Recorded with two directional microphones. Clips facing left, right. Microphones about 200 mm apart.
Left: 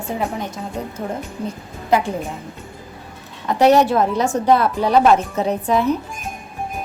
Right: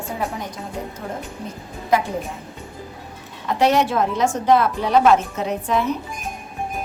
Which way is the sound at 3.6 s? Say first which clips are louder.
Left 4 dB; 40° left (ahead or behind).